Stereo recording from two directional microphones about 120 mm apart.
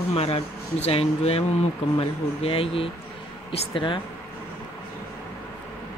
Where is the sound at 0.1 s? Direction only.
60° left (ahead or behind).